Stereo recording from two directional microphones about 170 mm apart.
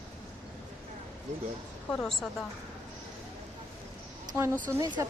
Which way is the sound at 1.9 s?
5° left (ahead or behind).